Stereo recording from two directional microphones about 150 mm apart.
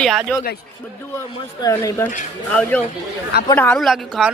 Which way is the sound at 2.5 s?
10° left (ahead or behind).